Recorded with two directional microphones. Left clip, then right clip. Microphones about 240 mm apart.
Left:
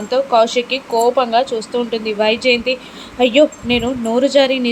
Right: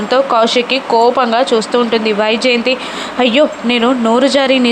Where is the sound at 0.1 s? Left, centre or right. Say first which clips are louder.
Right 2 dB; centre.